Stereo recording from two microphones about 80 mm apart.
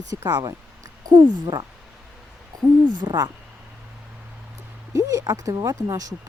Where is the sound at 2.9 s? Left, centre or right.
Right.